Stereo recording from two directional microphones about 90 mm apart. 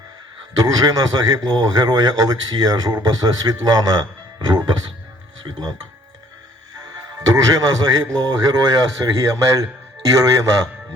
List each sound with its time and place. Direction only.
0.6 s a man's voice: 50° right (ahead or behind)
6.8 s a man's voice: 45° right (ahead or behind)